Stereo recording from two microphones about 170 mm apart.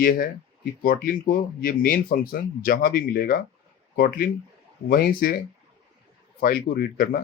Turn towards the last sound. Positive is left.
turn(degrees=60)  # may be behind; listen again after turning